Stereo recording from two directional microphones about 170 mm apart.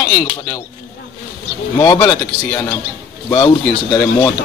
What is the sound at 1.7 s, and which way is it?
Speech, 20° left (ahead or behind).